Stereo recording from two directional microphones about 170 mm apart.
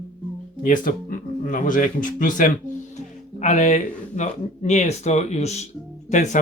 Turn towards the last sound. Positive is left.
turn(degrees=45)  # may be behind; listen again after turning